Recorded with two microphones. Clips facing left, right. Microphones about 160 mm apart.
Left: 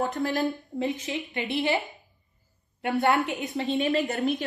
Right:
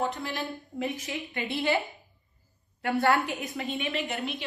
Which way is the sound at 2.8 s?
20° left (ahead or behind).